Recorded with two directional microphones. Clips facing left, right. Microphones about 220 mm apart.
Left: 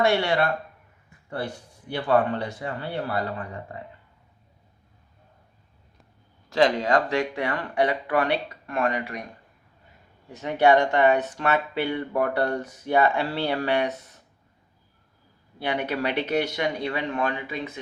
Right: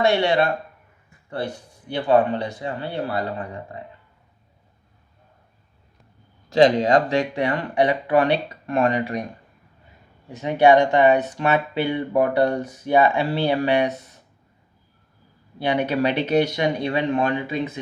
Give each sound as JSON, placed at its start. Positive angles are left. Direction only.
{"t": 0.0, "sound": "speech", "side_deg": -20}
{"t": 6.5, "sound": "speech", "side_deg": -20}
{"t": 10.4, "sound": "speech", "side_deg": -15}
{"t": 15.6, "sound": "speech", "side_deg": -20}